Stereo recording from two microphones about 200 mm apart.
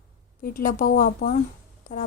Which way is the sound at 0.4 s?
45° left (ahead or behind).